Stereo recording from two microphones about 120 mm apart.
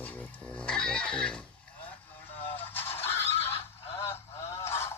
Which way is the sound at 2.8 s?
55° left (ahead or behind).